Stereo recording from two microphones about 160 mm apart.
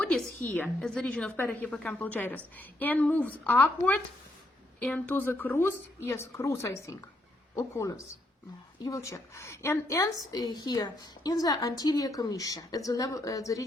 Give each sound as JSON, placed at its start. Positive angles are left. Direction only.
{"t": 0.0, "sound": "a woman's voice", "side_deg": 5}